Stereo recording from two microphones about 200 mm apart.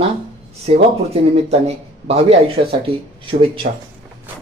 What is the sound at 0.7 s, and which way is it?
A man's voice, 35° right (ahead or behind).